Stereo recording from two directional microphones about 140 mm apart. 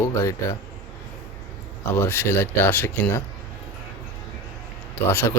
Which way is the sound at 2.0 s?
15° left (ahead or behind).